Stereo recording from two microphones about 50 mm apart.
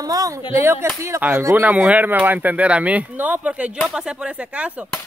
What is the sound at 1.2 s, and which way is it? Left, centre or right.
Speech, right.